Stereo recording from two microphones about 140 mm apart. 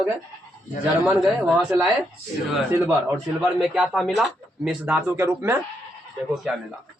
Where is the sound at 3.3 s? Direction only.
5° right (ahead or behind).